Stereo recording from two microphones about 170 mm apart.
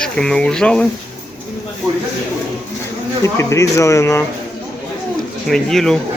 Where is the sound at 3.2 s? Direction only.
15° left (ahead or behind).